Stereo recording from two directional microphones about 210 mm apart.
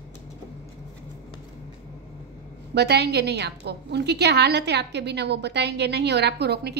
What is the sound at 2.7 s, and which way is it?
A woman's voice, 50° right (ahead or behind).